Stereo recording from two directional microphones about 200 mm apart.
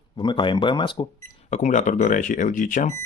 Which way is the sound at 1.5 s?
35° left (ahead or behind).